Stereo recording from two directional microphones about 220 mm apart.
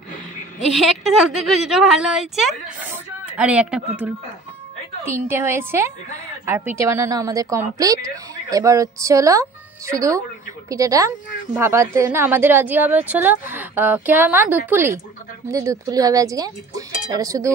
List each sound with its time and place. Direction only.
0.7 s a woman's voice: centre (ahead or behind)
5.0 s a woman's voice: 10° right (ahead or behind)